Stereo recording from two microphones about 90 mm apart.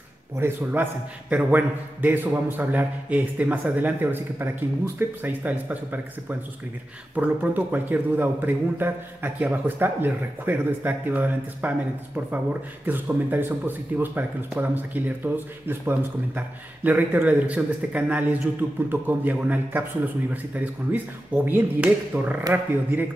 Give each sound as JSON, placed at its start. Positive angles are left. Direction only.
{"t": 0.4, "sound": "speech", "side_deg": -25}
{"t": 12.8, "sound": "speech", "side_deg": -20}